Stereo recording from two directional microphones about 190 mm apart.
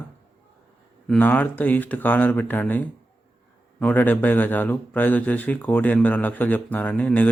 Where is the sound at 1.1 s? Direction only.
10° left (ahead or behind).